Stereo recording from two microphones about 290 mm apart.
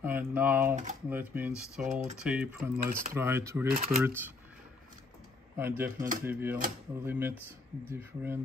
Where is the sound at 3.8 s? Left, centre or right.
Right.